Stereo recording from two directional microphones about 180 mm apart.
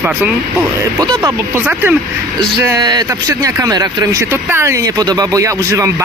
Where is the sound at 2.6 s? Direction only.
20° right (ahead or behind).